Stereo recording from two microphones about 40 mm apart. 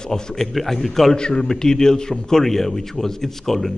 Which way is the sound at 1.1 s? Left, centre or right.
Left.